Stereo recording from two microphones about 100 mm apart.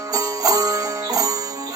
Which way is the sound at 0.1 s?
35° right (ahead or behind).